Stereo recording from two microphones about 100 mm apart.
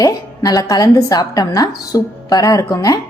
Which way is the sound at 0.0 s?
40° left (ahead or behind).